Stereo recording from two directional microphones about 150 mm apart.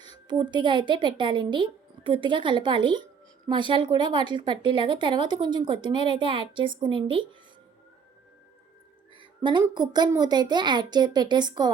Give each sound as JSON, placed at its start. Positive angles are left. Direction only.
{"t": 0.3, "sound": "a woman's voice", "side_deg": -30}
{"t": 9.4, "sound": "a woman's voice", "side_deg": -30}